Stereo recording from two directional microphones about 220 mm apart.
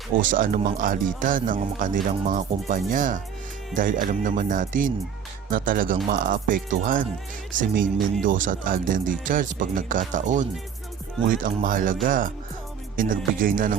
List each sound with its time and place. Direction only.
0.2 s speech: 40° right (ahead or behind)